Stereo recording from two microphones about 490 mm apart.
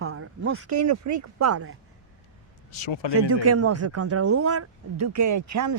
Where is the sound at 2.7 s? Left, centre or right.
Left.